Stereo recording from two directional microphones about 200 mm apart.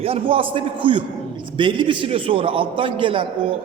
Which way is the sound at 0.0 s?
30° right (ahead or behind).